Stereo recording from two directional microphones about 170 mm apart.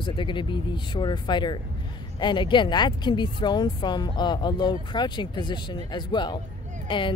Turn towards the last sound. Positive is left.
turn(degrees=30)  # may be behind; listen again after turning